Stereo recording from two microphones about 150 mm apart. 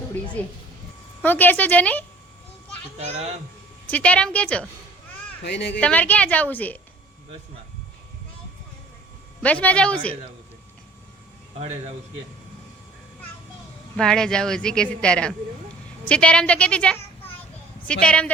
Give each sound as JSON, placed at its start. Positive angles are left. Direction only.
{"t": 0.4, "sound": "a woman's voice", "side_deg": 10}
{"t": 3.0, "sound": "a child's voice", "side_deg": -45}
{"t": 3.8, "sound": "a woman's voice", "side_deg": 10}
{"t": 5.8, "sound": "a woman's voice", "side_deg": 10}
{"t": 9.4, "sound": "a woman's voice", "side_deg": 10}
{"t": 13.9, "sound": "a woman's voice", "side_deg": 5}